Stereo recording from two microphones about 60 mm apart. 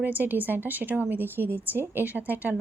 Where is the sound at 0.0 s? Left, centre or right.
Right.